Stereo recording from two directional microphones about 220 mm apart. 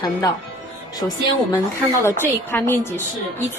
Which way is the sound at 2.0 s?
10° left (ahead or behind).